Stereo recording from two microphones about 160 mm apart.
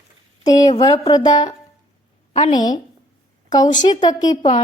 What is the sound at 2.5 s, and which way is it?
Speech, 25° left (ahead or behind).